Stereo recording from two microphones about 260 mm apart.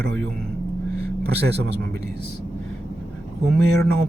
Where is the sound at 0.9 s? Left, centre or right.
Right.